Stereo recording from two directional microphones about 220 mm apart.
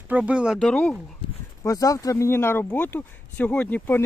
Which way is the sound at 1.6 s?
15° left (ahead or behind).